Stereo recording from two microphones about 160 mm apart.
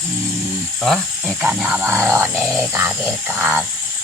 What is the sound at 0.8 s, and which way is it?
Speech, centre (ahead or behind).